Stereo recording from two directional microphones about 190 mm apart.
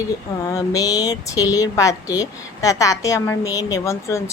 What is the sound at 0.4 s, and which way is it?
A woman's voice, 20° left (ahead or behind).